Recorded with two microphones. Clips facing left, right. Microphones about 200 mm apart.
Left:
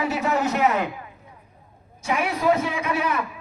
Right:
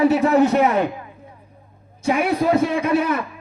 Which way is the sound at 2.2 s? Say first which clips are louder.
Right 3 dB; 35° right (ahead or behind).